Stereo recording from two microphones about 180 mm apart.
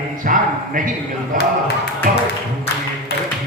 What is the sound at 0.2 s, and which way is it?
Speech, 55° right (ahead or behind).